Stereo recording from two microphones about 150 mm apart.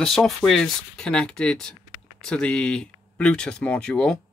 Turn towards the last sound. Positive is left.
turn(degrees=5)  # may be behind; listen again after turning